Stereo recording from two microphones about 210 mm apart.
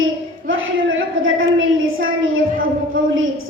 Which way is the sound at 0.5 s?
70° right (ahead or behind).